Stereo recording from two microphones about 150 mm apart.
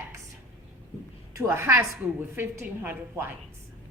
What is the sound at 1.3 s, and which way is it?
A woman's voice, 15° right (ahead or behind).